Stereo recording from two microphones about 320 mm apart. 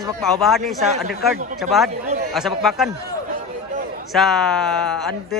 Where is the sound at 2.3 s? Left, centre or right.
Centre.